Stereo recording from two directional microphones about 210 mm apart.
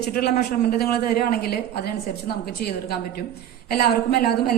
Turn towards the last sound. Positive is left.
turn(degrees=45)  # may be behind; listen again after turning